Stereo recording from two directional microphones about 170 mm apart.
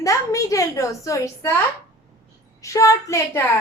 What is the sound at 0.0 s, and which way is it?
A woman's voice, 20° left (ahead or behind).